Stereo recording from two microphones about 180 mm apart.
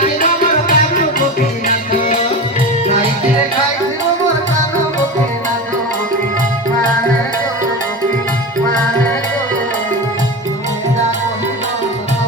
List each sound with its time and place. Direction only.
0.7 s music: 45° left (ahead or behind)